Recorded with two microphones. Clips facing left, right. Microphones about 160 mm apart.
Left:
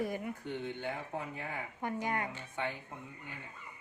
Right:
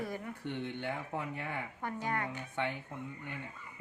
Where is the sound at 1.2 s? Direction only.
65° right (ahead or behind).